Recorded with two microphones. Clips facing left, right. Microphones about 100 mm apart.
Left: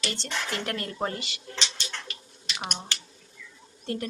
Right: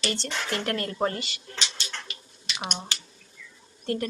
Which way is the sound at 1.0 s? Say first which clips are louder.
Right 3 dB; 15° left (ahead or behind).